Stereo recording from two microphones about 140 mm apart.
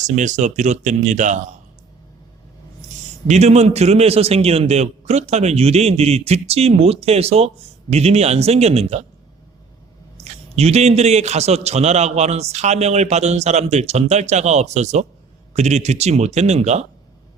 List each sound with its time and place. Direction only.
0.0 s speech: 60° right (ahead or behind)
3.2 s a man's voice: 55° right (ahead or behind)
10.5 s a man's voice: 50° right (ahead or behind)